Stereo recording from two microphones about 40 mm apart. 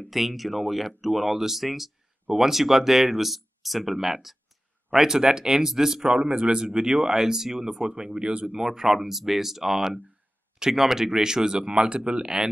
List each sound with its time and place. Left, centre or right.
0.0 s speech: centre
6.1 s speech: right
8.5 s speech: centre